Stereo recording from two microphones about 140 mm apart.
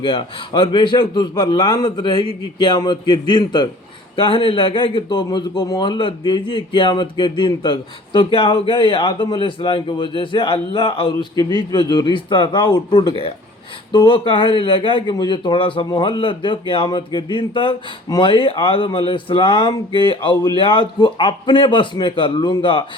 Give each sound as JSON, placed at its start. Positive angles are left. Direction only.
{"t": 0.0, "sound": "speech", "side_deg": 35}